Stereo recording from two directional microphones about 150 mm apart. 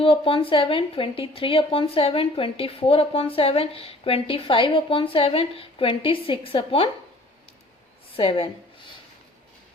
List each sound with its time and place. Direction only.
0.0 s speech: 35° left (ahead or behind)
8.1 s speech: 40° left (ahead or behind)